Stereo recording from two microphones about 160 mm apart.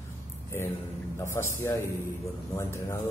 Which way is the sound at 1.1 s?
15° left (ahead or behind).